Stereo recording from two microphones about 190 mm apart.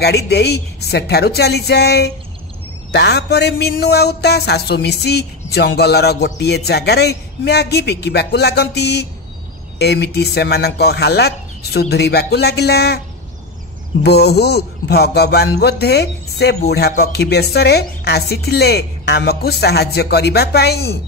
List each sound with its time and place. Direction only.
0.0 s speech: 60° left (ahead or behind)
14.0 s speech: 60° left (ahead or behind)